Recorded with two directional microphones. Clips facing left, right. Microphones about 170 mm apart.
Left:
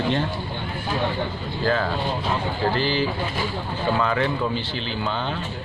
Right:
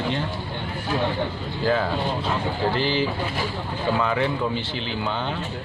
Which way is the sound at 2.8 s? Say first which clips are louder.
Even; 20° right (ahead or behind).